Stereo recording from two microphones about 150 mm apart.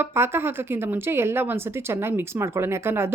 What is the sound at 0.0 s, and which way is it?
A woman's voice, 15° right (ahead or behind).